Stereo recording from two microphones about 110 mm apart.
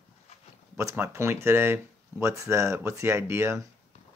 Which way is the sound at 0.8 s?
25° right (ahead or behind).